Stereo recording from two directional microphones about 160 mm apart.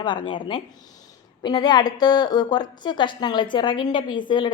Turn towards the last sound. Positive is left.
turn(degrees=30)  # may be behind; listen again after turning